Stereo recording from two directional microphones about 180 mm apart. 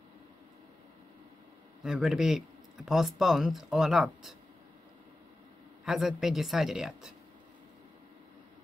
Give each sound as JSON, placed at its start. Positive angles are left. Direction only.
{"t": 1.8, "sound": "speech", "side_deg": 0}
{"t": 5.9, "sound": "speech", "side_deg": 0}